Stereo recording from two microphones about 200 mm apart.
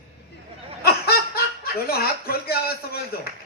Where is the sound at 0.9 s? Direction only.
50° left (ahead or behind).